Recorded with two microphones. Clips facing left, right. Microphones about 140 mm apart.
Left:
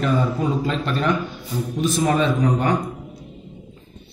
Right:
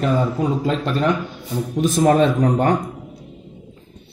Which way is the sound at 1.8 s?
45° right (ahead or behind).